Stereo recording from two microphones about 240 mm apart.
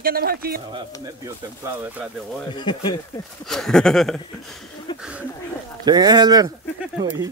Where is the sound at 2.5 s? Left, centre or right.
Centre.